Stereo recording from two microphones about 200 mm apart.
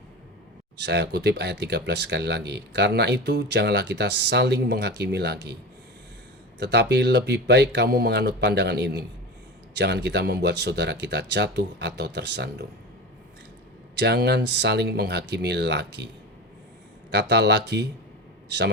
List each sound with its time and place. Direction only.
0.8 s speech: 55° right (ahead or behind)
6.6 s speech: 55° right (ahead or behind)
13.9 s speech: 60° right (ahead or behind)
17.1 s speech: 55° right (ahead or behind)